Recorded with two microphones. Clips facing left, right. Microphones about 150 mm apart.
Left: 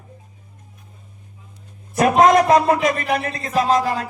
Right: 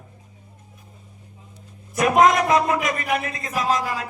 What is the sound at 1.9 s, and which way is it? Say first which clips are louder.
A man's voice: left 3 dB; 35° left (ahead or behind).